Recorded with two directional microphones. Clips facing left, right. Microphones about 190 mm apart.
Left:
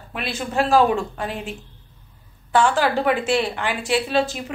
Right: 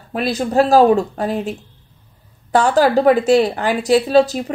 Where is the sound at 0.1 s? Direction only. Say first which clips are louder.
Right 8 dB; 40° right (ahead or behind).